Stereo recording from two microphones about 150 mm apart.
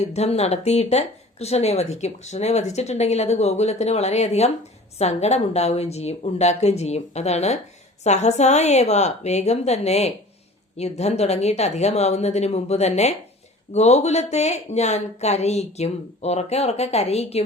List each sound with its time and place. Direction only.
0.0 s speech: 45° left (ahead or behind)